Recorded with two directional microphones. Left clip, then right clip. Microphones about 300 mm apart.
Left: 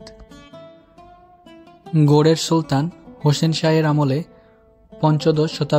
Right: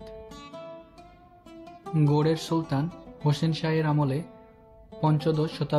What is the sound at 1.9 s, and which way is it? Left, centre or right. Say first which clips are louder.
Speech: left 10 dB; left.